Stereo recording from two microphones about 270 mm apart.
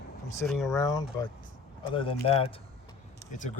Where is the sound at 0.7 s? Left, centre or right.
Centre.